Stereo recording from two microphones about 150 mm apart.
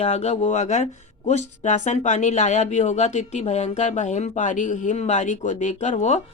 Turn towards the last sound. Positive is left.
turn(degrees=45)  # may be behind; listen again after turning